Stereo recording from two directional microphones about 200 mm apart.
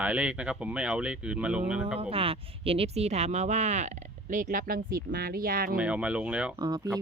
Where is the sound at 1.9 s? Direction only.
30° right (ahead or behind); by 5.8 s 45° right (ahead or behind).